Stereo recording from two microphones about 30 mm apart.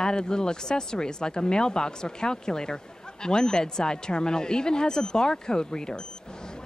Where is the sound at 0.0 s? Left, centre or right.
Left.